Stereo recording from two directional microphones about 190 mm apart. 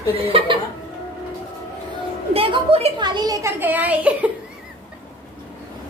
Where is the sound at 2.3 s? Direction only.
30° right (ahead or behind); by 4.3 s 10° right (ahead or behind).